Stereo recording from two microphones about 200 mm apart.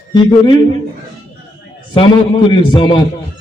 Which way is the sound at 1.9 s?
25° left (ahead or behind).